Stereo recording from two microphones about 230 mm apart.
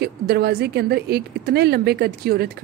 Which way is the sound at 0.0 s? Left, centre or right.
Right.